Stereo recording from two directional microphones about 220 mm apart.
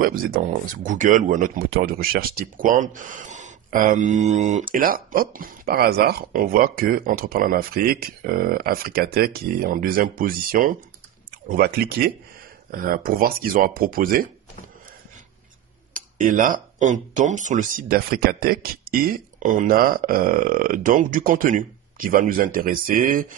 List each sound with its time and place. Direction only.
0.0 s speech: 40° right (ahead or behind)
15.9 s speech: 35° right (ahead or behind)